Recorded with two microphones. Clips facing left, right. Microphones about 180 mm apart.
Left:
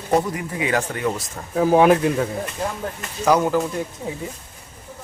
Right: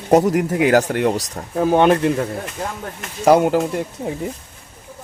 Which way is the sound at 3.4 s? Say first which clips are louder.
Right 3 dB; 80° right.